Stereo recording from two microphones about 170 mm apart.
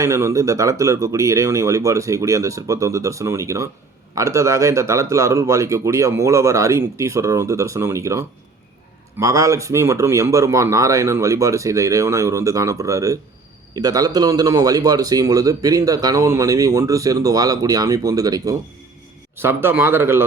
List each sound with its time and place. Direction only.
0.0 s speech: 15° right (ahead or behind)